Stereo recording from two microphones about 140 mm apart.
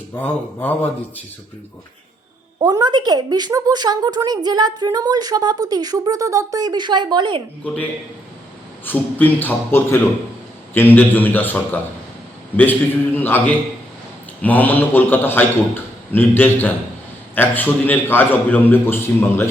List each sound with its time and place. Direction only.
0.1 s a man's voice: 10° left (ahead or behind)
2.6 s a woman's voice: 30° right (ahead or behind)
7.6 s a man's voice: 10° left (ahead or behind)